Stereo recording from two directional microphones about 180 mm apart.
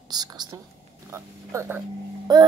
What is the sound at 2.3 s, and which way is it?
Speech, 20° right (ahead or behind).